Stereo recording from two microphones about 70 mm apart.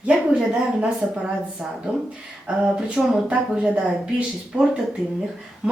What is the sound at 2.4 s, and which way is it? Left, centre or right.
Speech, centre.